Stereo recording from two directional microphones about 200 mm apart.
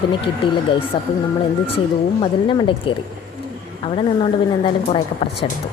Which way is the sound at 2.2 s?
25° left (ahead or behind).